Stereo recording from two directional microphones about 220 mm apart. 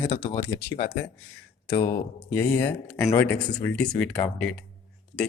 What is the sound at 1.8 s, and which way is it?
Speech, 40° left (ahead or behind).